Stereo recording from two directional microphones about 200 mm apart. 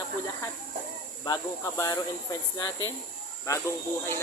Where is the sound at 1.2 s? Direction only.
20° left (ahead or behind).